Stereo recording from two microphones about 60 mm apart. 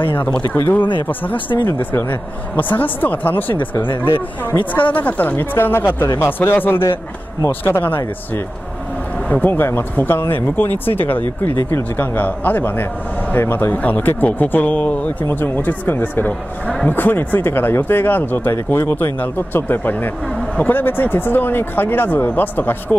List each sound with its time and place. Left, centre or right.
0.7 s speech: left
9.3 s speech: left